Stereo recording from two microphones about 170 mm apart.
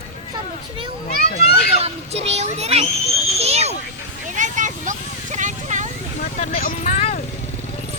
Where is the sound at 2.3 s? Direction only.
40° right (ahead or behind).